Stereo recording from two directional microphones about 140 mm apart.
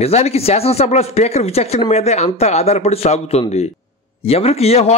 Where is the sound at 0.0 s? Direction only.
50° left (ahead or behind).